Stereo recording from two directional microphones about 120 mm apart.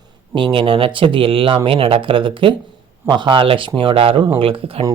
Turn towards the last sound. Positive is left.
turn(degrees=-50)  # may be behind; listen again after turning